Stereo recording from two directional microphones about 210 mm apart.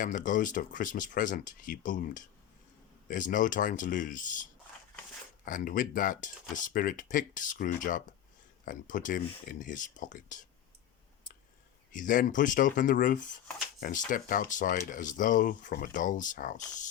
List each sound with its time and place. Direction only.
0.0 s speech: 40° left (ahead or behind)
5.5 s speech: 40° left (ahead or behind)
11.9 s speech: 40° left (ahead or behind)